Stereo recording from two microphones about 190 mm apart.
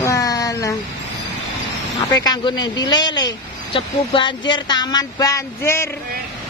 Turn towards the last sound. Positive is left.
turn(degrees=15)  # may be behind; listen again after turning